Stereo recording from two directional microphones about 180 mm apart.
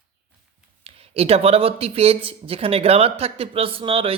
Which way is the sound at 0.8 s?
35° right (ahead or behind).